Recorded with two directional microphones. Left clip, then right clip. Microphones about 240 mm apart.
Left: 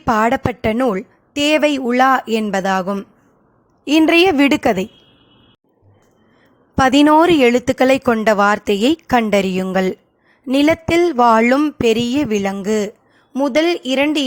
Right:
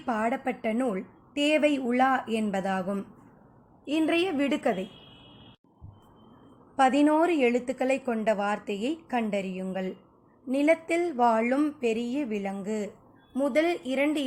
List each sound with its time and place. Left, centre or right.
0.0 s a woman's voice: left
6.7 s a woman's voice: left